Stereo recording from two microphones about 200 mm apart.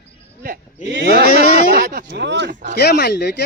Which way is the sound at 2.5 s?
40° right (ahead or behind).